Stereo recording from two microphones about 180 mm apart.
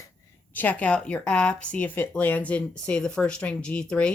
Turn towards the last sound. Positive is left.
turn(degrees=5)  # may be behind; listen again after turning